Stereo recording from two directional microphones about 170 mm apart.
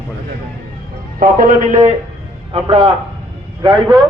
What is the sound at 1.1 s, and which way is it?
Speech, 55° right (ahead or behind).